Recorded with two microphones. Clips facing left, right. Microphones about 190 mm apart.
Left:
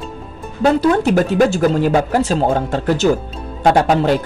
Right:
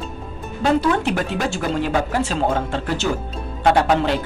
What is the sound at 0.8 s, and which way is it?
Speech, 40° left (ahead or behind).